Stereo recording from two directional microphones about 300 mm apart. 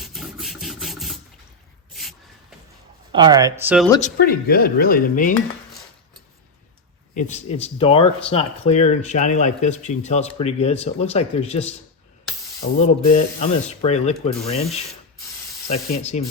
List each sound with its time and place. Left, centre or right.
0.0 s rub: centre
1.9 s a sound: centre
3.1 s speech: centre
4.0 s speech: left
7.1 s speech: left